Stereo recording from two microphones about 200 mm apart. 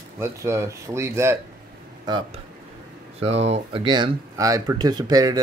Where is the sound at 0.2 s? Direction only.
15° right (ahead or behind).